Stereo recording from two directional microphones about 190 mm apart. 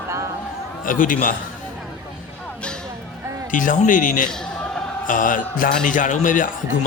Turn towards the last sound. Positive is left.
turn(degrees=45)  # may be behind; listen again after turning